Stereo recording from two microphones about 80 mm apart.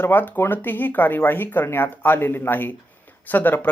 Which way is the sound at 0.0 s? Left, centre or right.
Left.